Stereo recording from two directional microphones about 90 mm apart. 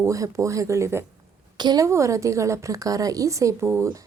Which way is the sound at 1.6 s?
50° right (ahead or behind).